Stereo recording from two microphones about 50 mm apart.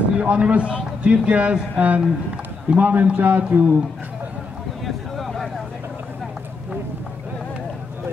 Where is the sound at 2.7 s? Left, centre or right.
Right.